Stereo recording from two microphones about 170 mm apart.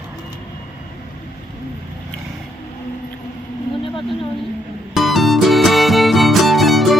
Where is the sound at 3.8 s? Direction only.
30° left (ahead or behind).